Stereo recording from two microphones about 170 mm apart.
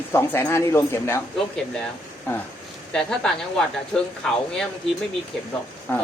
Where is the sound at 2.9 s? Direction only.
5° left (ahead or behind).